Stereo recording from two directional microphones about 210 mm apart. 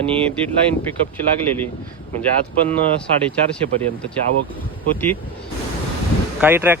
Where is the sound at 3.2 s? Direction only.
5° left (ahead or behind).